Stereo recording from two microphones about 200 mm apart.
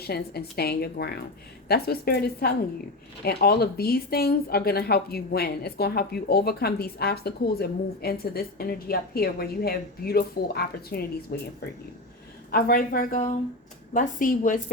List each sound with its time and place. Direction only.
0.0 s a woman's voice: 55° left (ahead or behind)
12.5 s a woman's voice: 50° left (ahead or behind)